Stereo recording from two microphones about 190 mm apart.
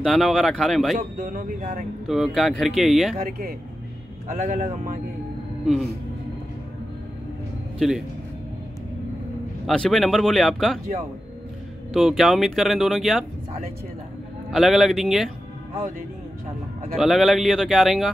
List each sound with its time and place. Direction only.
0.0 s speech: centre (ahead or behind)
0.9 s speech: 45° right (ahead or behind)
2.0 s speech: centre (ahead or behind)
3.3 s speech: 50° right (ahead or behind)
4.3 s speech: 40° right (ahead or behind)
9.7 s speech: centre (ahead or behind)
11.9 s speech: centre (ahead or behind)
14.5 s speech: centre (ahead or behind)
16.9 s speech: centre (ahead or behind)